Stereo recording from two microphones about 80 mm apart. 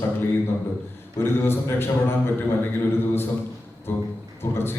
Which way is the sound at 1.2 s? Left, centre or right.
Left.